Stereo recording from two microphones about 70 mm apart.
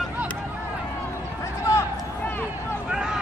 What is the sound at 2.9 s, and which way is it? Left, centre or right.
Vehicle, centre.